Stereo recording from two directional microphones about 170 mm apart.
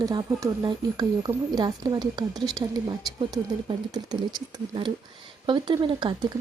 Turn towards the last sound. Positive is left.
turn(degrees=-30)  # may be behind; listen again after turning